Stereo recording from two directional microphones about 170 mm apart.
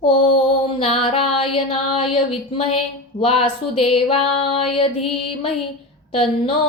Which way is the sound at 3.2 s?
35° left (ahead or behind).